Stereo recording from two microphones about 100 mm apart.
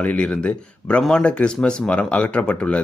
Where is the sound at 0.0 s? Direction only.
15° left (ahead or behind).